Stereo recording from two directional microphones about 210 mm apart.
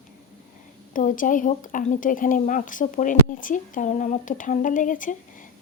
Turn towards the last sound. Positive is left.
turn(degrees=40)  # may be behind; listen again after turning